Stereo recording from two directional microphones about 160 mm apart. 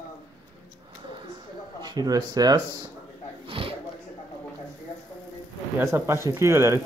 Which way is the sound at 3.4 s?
35° right (ahead or behind).